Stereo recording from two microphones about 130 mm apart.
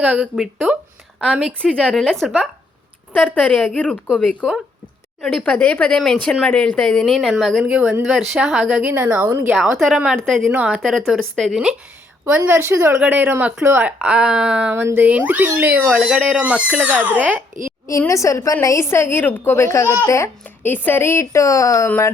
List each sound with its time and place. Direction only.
0.0 s a woman's voice: 5° right (ahead or behind)
3.1 s a woman's voice: 15° left (ahead or behind); by 11.7 s centre (ahead or behind)
12.2 s speech: 15° right (ahead or behind)
17.8 s speech: 25° left (ahead or behind)